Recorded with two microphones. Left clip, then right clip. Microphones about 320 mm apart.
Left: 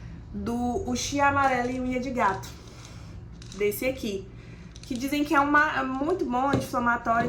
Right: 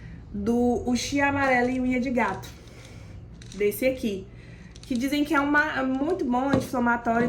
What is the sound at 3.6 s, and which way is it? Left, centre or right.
A woman's voice, centre.